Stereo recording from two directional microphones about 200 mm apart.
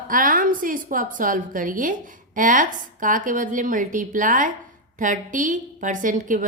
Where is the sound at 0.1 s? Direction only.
45° right (ahead or behind).